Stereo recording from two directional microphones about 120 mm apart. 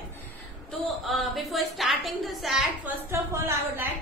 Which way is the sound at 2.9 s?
20° right (ahead or behind).